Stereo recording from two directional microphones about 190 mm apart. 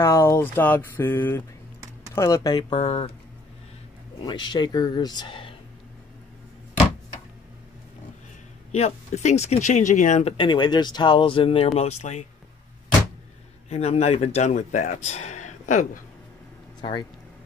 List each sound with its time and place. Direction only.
0.0 s speech: 15° left (ahead or behind); by 3.1 s 30° left (ahead or behind)
4.2 s speech: 25° left (ahead or behind)
8.7 s speech: 35° left (ahead or behind)
13.7 s speech: 35° left (ahead or behind)